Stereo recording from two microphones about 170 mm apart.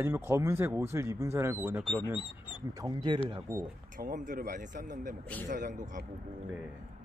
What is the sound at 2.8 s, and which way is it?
Speech, 25° right (ahead or behind).